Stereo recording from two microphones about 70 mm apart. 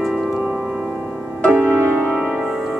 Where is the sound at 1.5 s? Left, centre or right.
Right.